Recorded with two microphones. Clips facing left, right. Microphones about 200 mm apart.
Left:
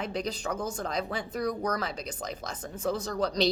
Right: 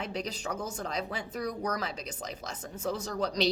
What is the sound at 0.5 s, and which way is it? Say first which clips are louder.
Speech: left 2 dB; 10° right (ahead or behind).